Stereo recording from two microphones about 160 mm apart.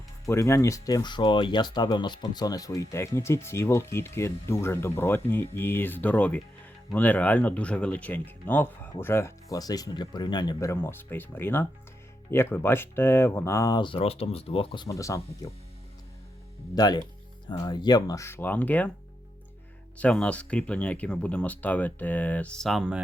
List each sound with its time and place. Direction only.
0.3 s speech: 20° left (ahead or behind); by 14.8 s 35° left (ahead or behind)
14.8 s speech: 20° left (ahead or behind)
16.7 s speech: 25° left (ahead or behind); by 18.9 s 10° left (ahead or behind)
20.0 s speech: 5° left (ahead or behind)